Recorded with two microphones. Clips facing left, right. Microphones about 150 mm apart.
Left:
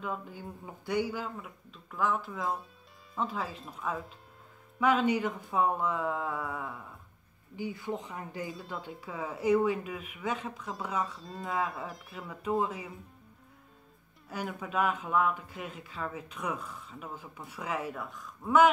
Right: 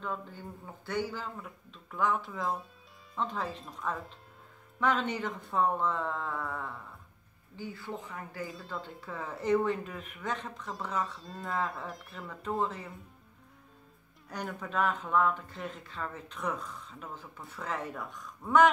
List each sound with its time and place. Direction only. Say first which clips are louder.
0.0 s speech: left 1 dB; 10° left (ahead or behind)
14.3 s speech: left 1 dB; 5° left (ahead or behind)